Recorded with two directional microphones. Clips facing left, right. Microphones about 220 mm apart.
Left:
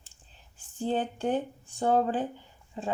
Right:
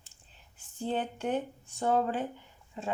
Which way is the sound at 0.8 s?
35° left (ahead or behind).